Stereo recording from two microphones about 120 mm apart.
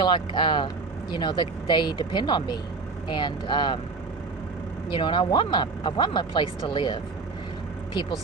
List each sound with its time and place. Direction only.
0.0 s speech: 40° left (ahead or behind)
4.9 s speech: 40° left (ahead or behind)